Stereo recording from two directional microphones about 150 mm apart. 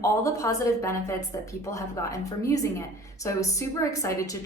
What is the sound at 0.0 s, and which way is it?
A woman's voice, 20° left (ahead or behind).